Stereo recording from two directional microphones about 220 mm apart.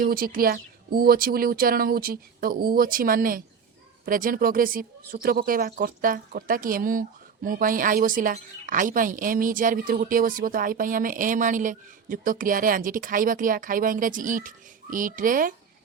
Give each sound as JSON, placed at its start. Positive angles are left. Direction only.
{"t": 0.0, "sound": "a woman's voice", "side_deg": -40}